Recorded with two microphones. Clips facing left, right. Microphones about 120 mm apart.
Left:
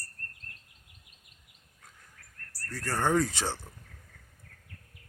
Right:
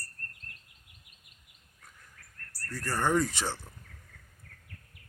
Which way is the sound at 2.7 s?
90° left.